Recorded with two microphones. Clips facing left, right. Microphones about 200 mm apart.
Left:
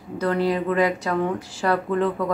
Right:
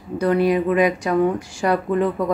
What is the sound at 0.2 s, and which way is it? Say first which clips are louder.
Speech: right 4 dB; 15° right (ahead or behind).